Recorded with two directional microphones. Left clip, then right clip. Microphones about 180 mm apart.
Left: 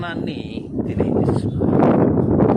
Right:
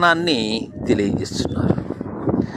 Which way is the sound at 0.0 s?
40° right (ahead or behind).